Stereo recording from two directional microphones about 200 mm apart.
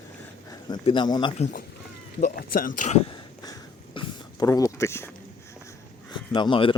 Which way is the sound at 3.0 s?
20° left (ahead or behind).